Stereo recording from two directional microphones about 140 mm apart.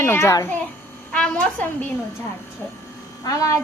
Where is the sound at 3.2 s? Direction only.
25° left (ahead or behind).